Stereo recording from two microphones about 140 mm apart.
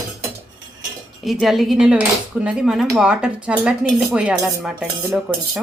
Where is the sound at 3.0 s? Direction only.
5° right (ahead or behind).